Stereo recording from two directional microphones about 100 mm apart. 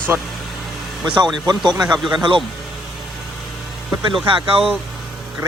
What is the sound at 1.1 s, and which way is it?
Speech, 45° right (ahead or behind).